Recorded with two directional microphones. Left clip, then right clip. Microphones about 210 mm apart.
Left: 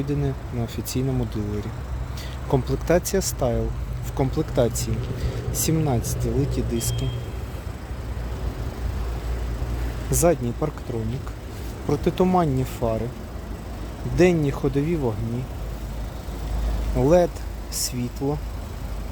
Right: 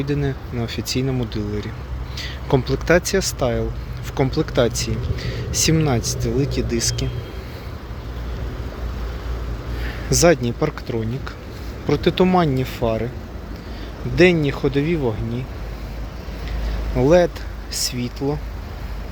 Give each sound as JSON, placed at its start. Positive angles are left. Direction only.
{"t": 0.0, "sound": "speech", "side_deg": 5}
{"t": 10.1, "sound": "speech", "side_deg": 0}
{"t": 11.9, "sound": "speech", "side_deg": 5}
{"t": 14.2, "sound": "speech", "side_deg": 10}
{"t": 17.0, "sound": "speech", "side_deg": 5}